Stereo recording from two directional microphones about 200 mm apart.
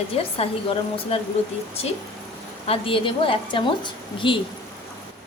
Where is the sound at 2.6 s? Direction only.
25° left (ahead or behind).